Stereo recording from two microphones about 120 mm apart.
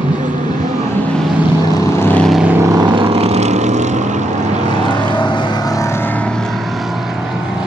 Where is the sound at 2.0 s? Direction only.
15° left (ahead or behind).